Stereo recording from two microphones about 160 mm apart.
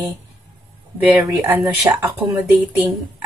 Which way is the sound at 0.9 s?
10° right (ahead or behind).